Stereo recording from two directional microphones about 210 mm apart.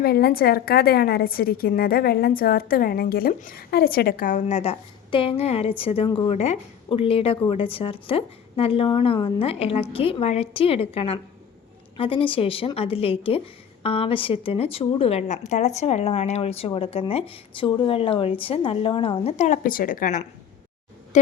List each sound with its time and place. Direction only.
0.0 s a woman's voice: 50° left (ahead or behind)